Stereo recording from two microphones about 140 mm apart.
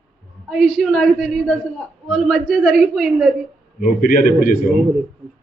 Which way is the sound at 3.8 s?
75° left (ahead or behind).